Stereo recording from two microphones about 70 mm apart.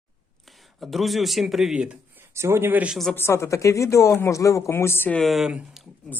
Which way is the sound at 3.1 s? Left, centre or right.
Left.